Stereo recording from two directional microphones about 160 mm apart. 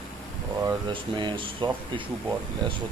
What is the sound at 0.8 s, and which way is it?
Speech, 30° right (ahead or behind).